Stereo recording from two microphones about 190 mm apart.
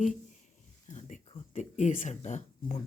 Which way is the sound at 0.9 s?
40° left (ahead or behind).